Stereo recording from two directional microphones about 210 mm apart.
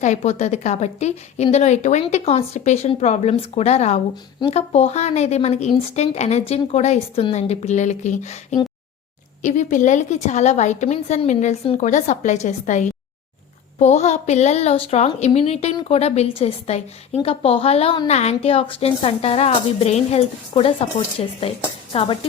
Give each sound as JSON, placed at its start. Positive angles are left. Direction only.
{"t": 0.0, "sound": "a woman's voice", "side_deg": 35}